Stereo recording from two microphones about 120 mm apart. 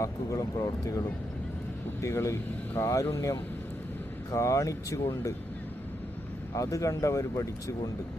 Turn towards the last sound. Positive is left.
turn(degrees=30)  # may be behind; listen again after turning